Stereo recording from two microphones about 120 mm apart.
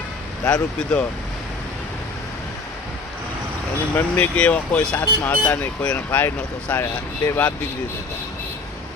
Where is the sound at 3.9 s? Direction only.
15° left (ahead or behind).